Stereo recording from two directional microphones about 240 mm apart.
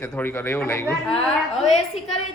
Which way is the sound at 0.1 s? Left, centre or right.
Centre.